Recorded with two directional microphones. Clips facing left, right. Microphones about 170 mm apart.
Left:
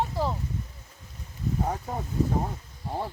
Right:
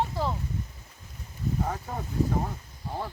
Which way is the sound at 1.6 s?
20° left (ahead or behind).